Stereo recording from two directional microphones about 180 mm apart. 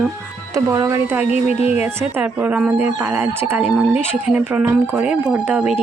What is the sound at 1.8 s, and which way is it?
Speech, 10° right (ahead or behind).